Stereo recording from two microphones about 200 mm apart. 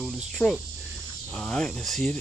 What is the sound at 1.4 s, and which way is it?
Speech, 5° left (ahead or behind).